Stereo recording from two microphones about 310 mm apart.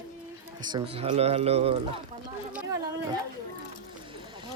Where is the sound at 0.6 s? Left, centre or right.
Centre.